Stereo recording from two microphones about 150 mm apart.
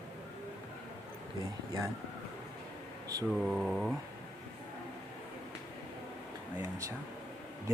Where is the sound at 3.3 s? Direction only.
Centre (ahead or behind).